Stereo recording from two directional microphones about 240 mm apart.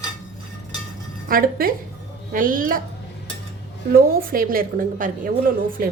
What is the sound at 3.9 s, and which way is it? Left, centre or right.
A woman's voice, right.